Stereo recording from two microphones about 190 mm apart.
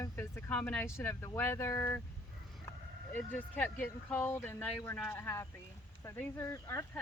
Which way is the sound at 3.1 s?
10° left (ahead or behind).